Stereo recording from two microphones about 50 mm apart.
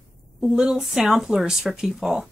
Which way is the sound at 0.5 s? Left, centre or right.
Centre.